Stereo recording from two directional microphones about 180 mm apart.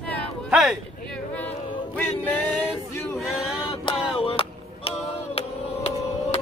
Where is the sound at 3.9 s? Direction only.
30° left (ahead or behind).